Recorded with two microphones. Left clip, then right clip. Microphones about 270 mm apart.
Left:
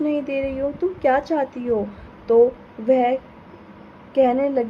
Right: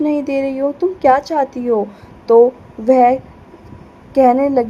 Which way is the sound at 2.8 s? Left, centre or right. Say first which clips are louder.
Right 7 dB; centre.